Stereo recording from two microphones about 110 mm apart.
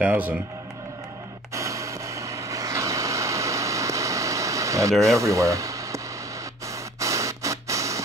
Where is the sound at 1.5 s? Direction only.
30° right (ahead or behind).